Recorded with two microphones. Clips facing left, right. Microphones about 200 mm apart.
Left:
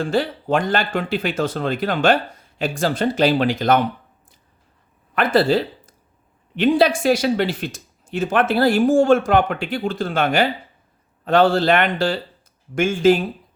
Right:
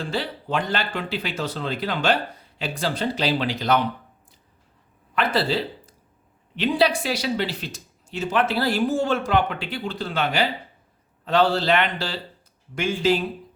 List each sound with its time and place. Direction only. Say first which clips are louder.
0.0 s speech: left 7 dB; 50° left (ahead or behind)
5.1 s speech: left 6 dB; 50° left (ahead or behind)